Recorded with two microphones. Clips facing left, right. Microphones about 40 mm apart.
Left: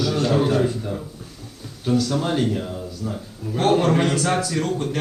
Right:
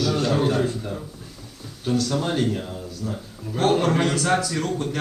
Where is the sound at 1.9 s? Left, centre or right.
Centre.